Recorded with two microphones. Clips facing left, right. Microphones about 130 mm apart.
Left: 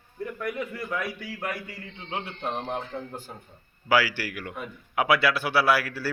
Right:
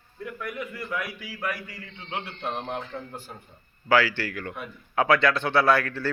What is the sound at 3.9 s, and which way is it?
Speech, 10° left (ahead or behind).